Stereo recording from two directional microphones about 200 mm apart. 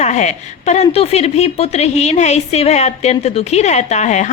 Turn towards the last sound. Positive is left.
turn(degrees=35)  # may be behind; listen again after turning